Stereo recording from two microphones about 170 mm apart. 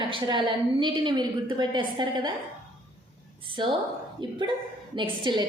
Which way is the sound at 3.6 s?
25° right (ahead or behind).